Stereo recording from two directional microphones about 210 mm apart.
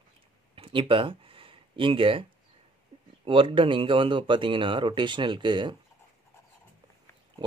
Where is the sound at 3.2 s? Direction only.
25° right (ahead or behind).